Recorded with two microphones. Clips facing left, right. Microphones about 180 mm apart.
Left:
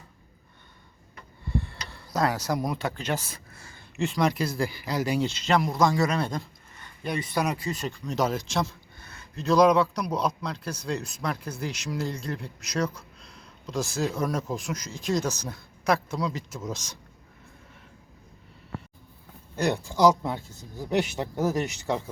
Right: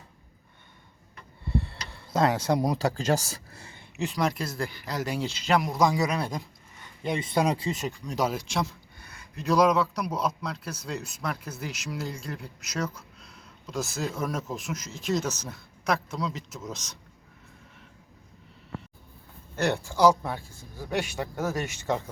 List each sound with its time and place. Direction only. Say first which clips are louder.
1.5 s speech: right 1 dB; 30° right (ahead or behind)
3.9 s speech: left 3 dB; 5° right (ahead or behind)
19.5 s speech: left 1 dB; 15° left (ahead or behind)